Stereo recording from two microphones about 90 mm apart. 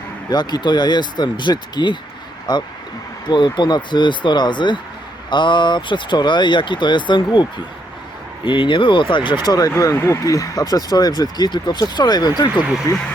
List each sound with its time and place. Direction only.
0.3 s speech: 50° left (ahead or behind)
3.2 s speech: 60° left (ahead or behind)
8.4 s speech: 65° left (ahead or behind)
9.5 s speech: 40° left (ahead or behind)
12.9 s speech: 40° left (ahead or behind)